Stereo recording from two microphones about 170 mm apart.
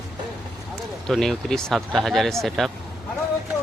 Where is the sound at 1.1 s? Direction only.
Centre (ahead or behind).